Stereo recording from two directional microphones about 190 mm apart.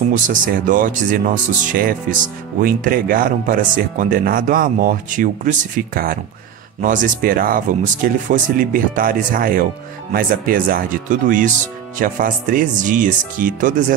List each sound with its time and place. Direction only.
0.1 s speech: 45° right (ahead or behind)